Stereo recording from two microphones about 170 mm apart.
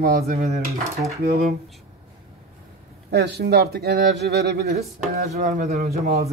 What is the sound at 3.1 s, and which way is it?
Speech, 70° right (ahead or behind).